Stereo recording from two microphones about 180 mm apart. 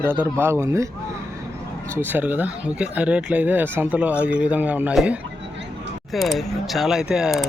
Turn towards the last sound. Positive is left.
turn(degrees=-5)  # may be behind; listen again after turning